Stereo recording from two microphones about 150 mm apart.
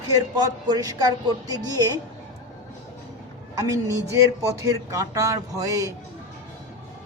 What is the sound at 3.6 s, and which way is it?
Speech, 20° right (ahead or behind).